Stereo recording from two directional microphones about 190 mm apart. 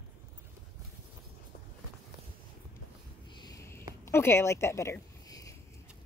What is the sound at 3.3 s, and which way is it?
Sniff, 20° left (ahead or behind).